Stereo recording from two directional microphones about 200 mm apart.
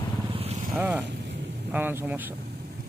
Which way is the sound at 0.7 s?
10° right (ahead or behind).